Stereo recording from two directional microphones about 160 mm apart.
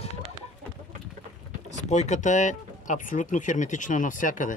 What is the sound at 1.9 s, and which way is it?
Speech, 45° left (ahead or behind).